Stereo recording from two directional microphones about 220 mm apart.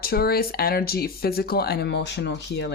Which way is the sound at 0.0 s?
45° left (ahead or behind).